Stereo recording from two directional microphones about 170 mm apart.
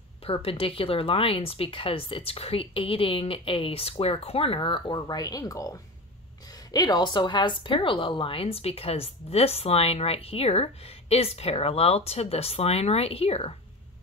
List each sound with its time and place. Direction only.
0.2 s speech: 35° left (ahead or behind)